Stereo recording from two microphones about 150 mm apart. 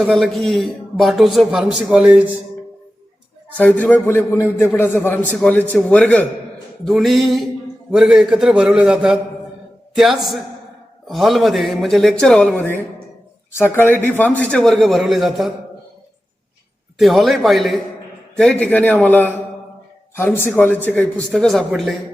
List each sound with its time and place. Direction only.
0.0 s a man's voice: centre (ahead or behind)
3.6 s a man's voice: 10° left (ahead or behind)
17.0 s a man's voice: centre (ahead or behind)